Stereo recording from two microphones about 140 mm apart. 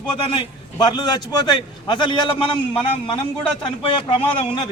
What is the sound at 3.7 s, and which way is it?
A man's voice, 35° left (ahead or behind).